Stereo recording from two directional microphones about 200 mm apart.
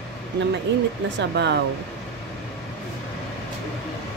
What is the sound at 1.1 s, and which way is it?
Speech, 60° right (ahead or behind).